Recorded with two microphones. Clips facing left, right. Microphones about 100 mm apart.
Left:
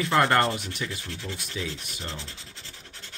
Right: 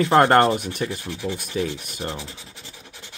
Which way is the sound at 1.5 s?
40° right (ahead or behind).